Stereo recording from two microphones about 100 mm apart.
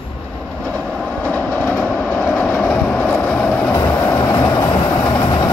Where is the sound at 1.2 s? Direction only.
15° left (ahead or behind).